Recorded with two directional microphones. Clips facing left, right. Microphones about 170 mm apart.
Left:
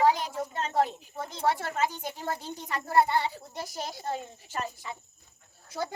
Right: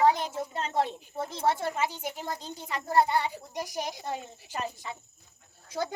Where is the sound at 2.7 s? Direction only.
15° right (ahead or behind).